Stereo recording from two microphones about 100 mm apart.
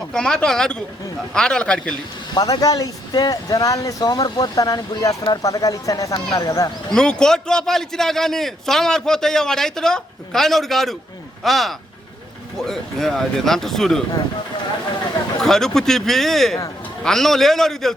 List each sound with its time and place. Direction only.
0.1 s speech: 10° left (ahead or behind)
2.3 s speech: 40° left (ahead or behind)
6.9 s a man's voice: 5° left (ahead or behind)
15.4 s a man's voice: 5° left (ahead or behind)